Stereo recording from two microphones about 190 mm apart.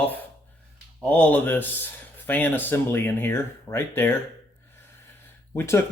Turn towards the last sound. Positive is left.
turn(degrees=10)  # may be behind; listen again after turning